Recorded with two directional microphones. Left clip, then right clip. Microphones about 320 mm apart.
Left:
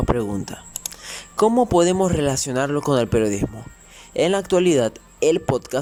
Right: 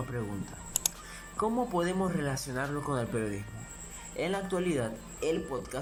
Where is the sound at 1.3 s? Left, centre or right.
Left.